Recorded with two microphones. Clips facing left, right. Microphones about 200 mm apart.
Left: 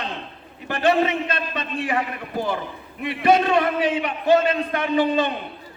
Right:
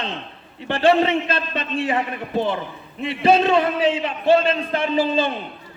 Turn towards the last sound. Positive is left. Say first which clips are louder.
# even
turn(degrees=-25)  # may be behind; listen again after turning